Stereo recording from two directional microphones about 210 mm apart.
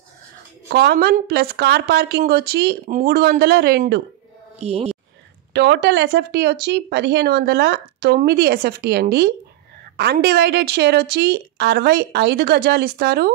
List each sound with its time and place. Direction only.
0.7 s speech: 50° right (ahead or behind)
4.6 s speech: 30° right (ahead or behind)
5.5 s speech: 55° right (ahead or behind)